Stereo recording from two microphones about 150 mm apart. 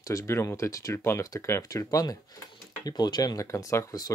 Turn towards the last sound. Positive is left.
turn(degrees=20)  # may be behind; listen again after turning